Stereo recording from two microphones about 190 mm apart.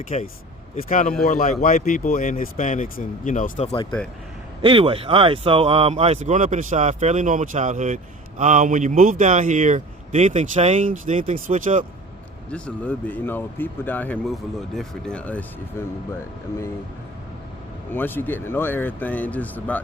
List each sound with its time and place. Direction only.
0.1 s speech: 35° left (ahead or behind)
4.6 s speech: 25° right (ahead or behind); by 11.9 s 45° right (ahead or behind)
12.5 s speech: 5° left (ahead or behind)
17.9 s speech: 10° left (ahead or behind)